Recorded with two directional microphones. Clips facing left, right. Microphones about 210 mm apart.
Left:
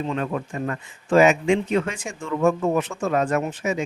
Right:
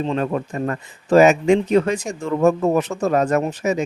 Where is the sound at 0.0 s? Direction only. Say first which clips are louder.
Right 4 dB; 35° right (ahead or behind).